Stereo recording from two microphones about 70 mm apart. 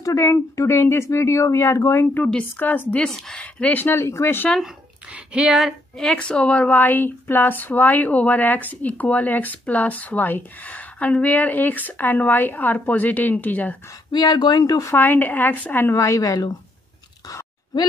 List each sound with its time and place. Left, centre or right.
0.0 s speech: left
2.1 s a woman's voice: centre
3.0 s speech: centre
3.3 s speech: centre; by 4.5 s left
5.1 s speech: centre
5.9 s a woman's voice: centre
14.1 s speech: left
15.0 s a woman's voice: left
15.9 s a woman's voice: left